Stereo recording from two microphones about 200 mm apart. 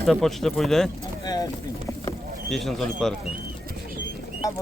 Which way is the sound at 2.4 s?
Centre (ahead or behind).